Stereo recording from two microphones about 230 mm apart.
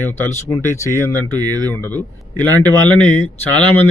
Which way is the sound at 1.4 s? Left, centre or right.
Centre.